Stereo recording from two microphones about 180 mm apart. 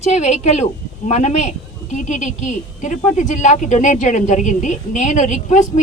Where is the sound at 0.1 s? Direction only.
40° left (ahead or behind).